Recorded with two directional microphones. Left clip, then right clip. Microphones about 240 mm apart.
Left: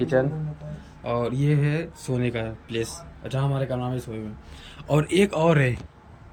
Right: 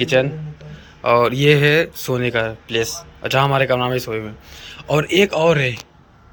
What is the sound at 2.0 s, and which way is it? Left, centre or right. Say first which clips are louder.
Speech: right 9 dB; centre.